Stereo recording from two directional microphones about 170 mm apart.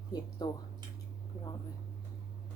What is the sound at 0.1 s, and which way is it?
Speech, 25° left (ahead or behind).